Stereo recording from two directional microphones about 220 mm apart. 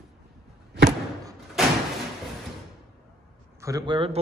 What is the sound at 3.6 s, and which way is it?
Speech, 15° right (ahead or behind).